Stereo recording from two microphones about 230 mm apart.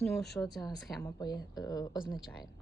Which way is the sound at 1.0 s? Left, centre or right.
Centre.